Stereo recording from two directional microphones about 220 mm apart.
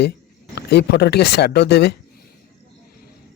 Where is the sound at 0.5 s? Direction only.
50° left (ahead or behind).